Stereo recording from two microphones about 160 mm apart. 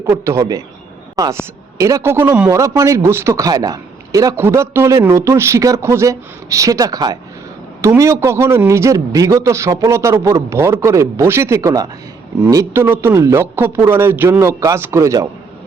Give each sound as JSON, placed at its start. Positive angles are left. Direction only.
{"t": 0.0, "sound": "a man's voice", "side_deg": -20}